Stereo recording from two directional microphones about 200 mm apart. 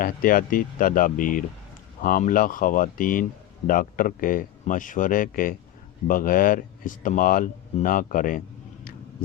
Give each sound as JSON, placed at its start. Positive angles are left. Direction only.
{"t": 0.0, "sound": "speech", "side_deg": 45}